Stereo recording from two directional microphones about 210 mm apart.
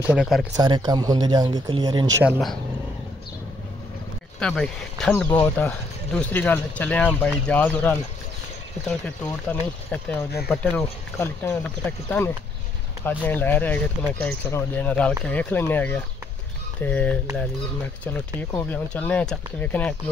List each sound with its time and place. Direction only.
0.1 s speech: centre (ahead or behind)
0.6 s speech: 20° right (ahead or behind)
4.4 s speech: 5° left (ahead or behind)